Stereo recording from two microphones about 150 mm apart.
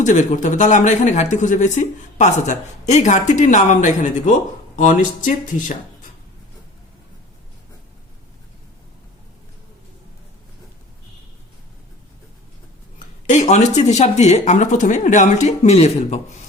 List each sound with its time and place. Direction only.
0.0 s speech: 55° left (ahead or behind)
13.2 s speech: 55° left (ahead or behind)